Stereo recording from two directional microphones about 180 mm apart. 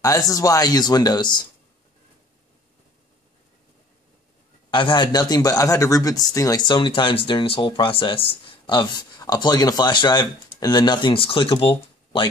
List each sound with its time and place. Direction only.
0.3 s speech: 20° left (ahead or behind)
4.6 s speech: 25° left (ahead or behind)